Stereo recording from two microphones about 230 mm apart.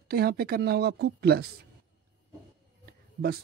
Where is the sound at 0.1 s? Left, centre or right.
Right.